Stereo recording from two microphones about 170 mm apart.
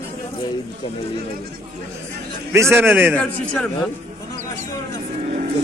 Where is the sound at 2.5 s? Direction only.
15° right (ahead or behind).